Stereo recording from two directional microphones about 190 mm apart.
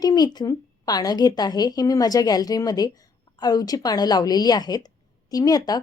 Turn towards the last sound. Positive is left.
turn(degrees=20)  # may be behind; listen again after turning